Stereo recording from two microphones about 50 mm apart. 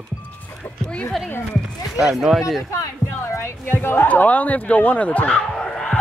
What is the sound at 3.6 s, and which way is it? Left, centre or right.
Speech, left.